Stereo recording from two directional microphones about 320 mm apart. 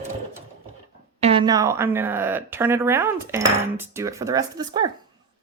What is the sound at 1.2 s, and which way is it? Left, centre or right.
A woman's voice, centre.